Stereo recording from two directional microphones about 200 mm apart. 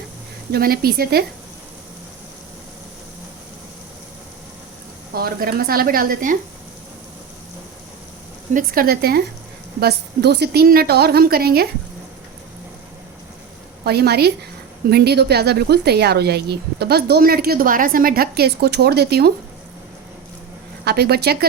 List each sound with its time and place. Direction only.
0.5 s speech: 50° right (ahead or behind)
5.1 s speech: 50° right (ahead or behind)
8.5 s speech: 45° right (ahead or behind)
13.8 s speech: 55° right (ahead or behind)
20.8 s speech: 55° right (ahead or behind)